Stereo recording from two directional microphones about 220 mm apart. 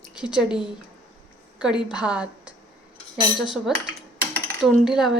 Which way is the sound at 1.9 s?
5° right (ahead or behind).